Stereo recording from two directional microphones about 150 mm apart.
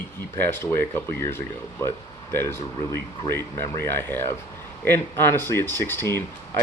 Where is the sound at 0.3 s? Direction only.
15° left (ahead or behind).